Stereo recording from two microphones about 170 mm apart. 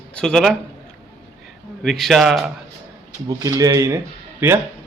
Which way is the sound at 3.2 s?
20° right (ahead or behind).